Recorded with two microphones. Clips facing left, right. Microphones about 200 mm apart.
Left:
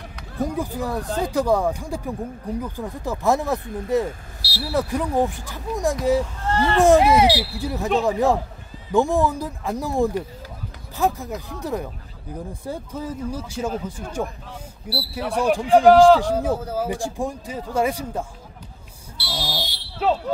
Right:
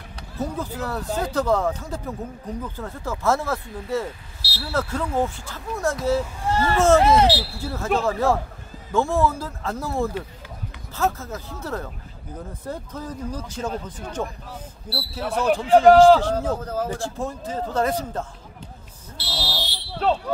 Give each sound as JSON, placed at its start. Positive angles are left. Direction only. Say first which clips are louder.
{"t": 0.4, "sound": "a man's voice", "louder": "left 3 dB", "side_deg": 15}
{"t": 6.4, "sound": "a sound", "louder": "left 1 dB", "side_deg": -10}
{"t": 6.8, "sound": "a man's voice", "louder": "left 2 dB", "side_deg": 15}
{"t": 15.1, "sound": "a man's voice", "louder": "left 1 dB", "side_deg": 10}
{"t": 19.1, "sound": "smoke detector", "louder": "left 1 dB", "side_deg": 10}